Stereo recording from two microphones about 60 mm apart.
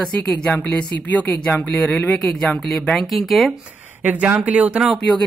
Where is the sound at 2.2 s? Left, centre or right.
Centre.